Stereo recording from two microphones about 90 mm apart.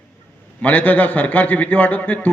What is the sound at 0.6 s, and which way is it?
A man's voice, 15° left (ahead or behind).